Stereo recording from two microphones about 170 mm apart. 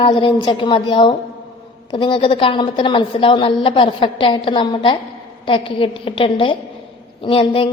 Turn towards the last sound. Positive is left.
turn(degrees=30)  # may be behind; listen again after turning